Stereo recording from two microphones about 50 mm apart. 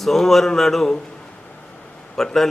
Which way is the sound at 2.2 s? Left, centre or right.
Centre.